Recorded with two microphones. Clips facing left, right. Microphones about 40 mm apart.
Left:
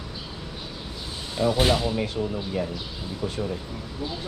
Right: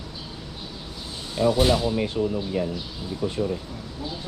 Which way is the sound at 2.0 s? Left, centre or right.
Centre.